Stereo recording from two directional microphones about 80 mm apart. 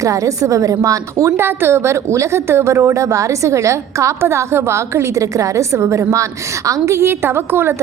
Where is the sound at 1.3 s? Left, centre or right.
Right.